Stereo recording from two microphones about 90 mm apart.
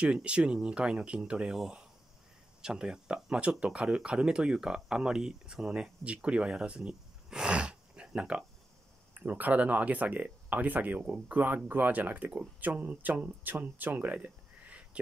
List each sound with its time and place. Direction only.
0.0 s speech: 10° right (ahead or behind)